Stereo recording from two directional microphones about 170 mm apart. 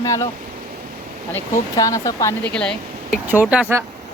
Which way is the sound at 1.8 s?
20° left (ahead or behind).